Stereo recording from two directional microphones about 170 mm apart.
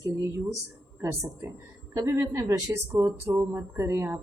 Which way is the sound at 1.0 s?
15° right (ahead or behind).